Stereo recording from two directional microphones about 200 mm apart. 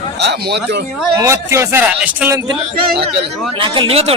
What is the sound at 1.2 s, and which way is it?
A man's voice, 15° right (ahead or behind).